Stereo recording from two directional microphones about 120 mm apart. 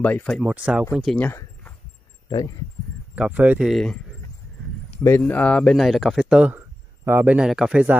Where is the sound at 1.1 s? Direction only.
15° left (ahead or behind).